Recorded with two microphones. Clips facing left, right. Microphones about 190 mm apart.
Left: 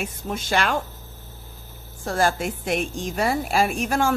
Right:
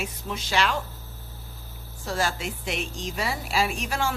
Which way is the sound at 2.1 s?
50° left (ahead or behind).